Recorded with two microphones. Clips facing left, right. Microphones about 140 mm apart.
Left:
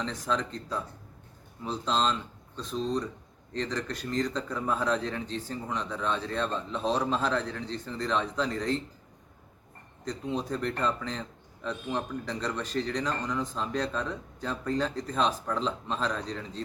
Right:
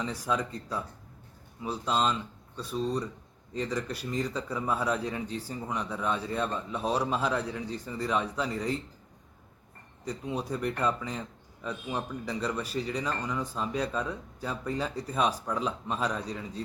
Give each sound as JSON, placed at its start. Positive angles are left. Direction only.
{"t": 0.0, "sound": "a man's voice", "side_deg": -10}
{"t": 10.0, "sound": "a man's voice", "side_deg": -10}